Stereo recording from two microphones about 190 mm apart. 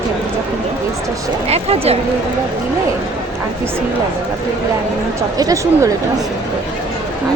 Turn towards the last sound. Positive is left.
turn(degrees=-20)  # may be behind; listen again after turning